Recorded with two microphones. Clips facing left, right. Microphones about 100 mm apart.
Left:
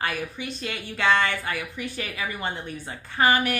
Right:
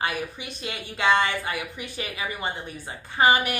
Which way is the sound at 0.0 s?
15° right (ahead or behind).